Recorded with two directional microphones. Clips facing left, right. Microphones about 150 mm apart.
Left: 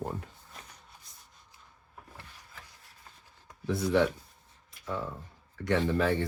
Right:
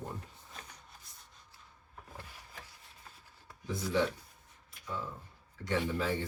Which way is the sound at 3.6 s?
65° left (ahead or behind).